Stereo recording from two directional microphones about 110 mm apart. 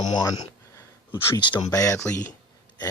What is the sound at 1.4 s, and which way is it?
Speech, 45° left (ahead or behind).